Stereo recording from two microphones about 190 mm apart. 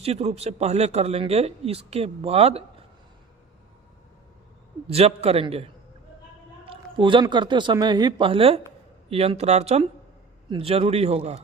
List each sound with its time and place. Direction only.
0.0 s a man's voice: 35° right (ahead or behind)
4.9 s a man's voice: 35° right (ahead or behind)